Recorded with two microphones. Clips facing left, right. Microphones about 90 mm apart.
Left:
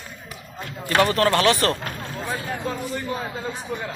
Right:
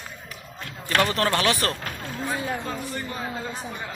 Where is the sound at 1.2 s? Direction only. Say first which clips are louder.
Left 4 dB; 15° right (ahead or behind).